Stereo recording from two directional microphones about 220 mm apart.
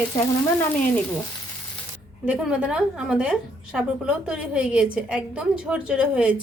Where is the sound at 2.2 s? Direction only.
5° right (ahead or behind).